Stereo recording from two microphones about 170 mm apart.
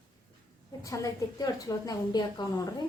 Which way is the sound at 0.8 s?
20° left (ahead or behind).